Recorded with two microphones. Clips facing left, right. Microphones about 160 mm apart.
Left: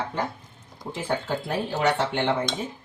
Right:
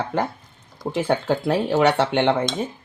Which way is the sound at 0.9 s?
75° right (ahead or behind).